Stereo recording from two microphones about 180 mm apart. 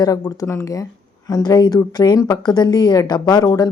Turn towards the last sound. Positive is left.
turn(degrees=20)  # may be behind; listen again after turning